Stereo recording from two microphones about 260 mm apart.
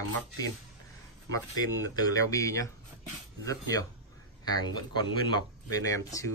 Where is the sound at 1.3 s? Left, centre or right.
Centre.